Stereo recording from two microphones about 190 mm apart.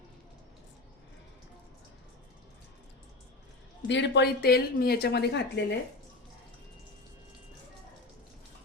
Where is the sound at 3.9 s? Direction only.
65° left (ahead or behind).